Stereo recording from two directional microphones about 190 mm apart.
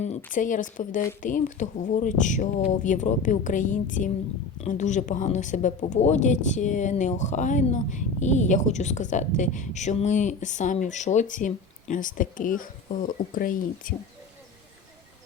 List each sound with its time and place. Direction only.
0.3 s speech: 45° left (ahead or behind)